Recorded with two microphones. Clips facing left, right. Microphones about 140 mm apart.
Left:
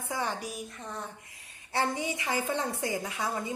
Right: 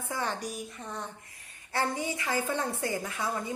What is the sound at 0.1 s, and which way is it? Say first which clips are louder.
Speech: even; 15° left (ahead or behind).